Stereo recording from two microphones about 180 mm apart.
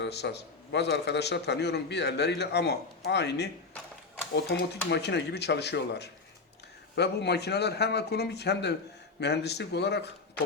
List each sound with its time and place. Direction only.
0.0 s a man's voice: 70° left (ahead or behind)